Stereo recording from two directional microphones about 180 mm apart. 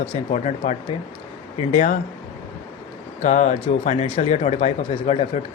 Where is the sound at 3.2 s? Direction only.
40° left (ahead or behind).